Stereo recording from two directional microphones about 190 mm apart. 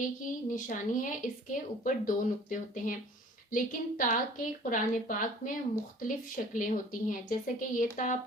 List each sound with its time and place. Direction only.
0.5 s speech: 45° left (ahead or behind)